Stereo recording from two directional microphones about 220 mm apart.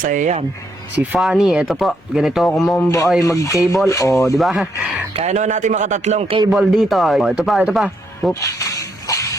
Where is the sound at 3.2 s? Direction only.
15° left (ahead or behind).